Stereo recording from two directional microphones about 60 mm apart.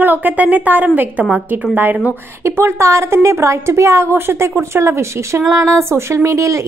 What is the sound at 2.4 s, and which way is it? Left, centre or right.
A woman's voice, right.